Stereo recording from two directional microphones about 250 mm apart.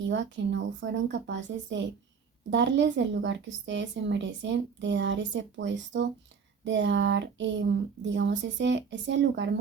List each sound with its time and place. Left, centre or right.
0.1 s a woman's voice: right